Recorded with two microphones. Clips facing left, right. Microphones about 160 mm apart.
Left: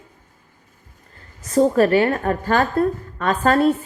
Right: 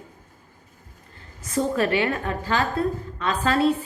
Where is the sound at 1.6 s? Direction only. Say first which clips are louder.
Left 7 dB; 40° left (ahead or behind).